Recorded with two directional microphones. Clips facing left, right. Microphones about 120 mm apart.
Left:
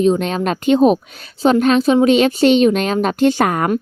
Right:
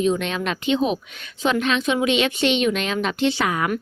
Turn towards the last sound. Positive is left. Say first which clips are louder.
# left 7 dB
turn(degrees=45)  # may be behind; listen again after turning